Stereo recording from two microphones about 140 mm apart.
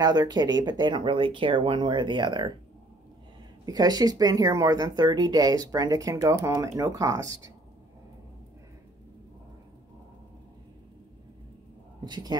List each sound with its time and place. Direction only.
0.0 s speech: 30° right (ahead or behind)
3.6 s speech: 30° right (ahead or behind)
12.0 s speech: 30° right (ahead or behind)